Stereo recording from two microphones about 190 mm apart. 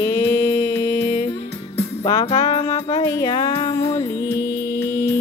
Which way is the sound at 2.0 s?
20° left (ahead or behind).